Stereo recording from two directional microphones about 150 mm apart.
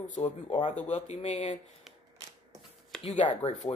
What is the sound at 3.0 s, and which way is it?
Speech, 50° left (ahead or behind).